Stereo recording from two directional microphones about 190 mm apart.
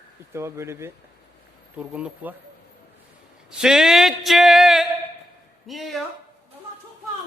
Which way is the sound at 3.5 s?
5° right (ahead or behind).